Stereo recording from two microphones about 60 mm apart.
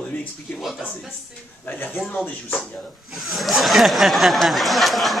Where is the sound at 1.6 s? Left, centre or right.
Left.